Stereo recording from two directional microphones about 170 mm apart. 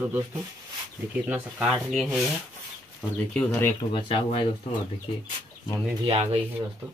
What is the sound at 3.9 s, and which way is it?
Speech, 30° left (ahead or behind).